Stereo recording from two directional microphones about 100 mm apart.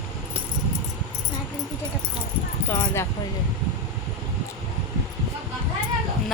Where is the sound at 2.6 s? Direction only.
25° left (ahead or behind).